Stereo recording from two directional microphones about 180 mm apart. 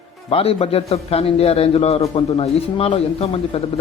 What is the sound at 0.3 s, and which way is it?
A man's voice, 30° left (ahead or behind).